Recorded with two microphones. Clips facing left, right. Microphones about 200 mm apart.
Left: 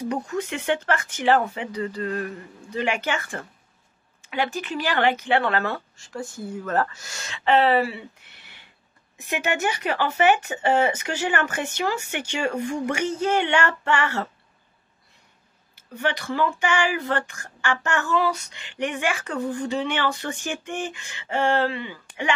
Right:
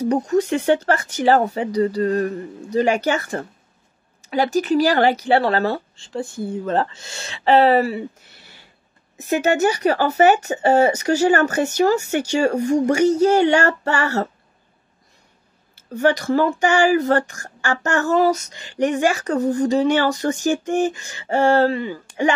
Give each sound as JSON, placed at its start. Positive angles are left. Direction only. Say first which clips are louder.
{"t": 0.1, "sound": "speech", "louder": "right 9 dB", "side_deg": -40}
{"t": 15.9, "sound": "speech", "louder": "right 9 dB", "side_deg": -40}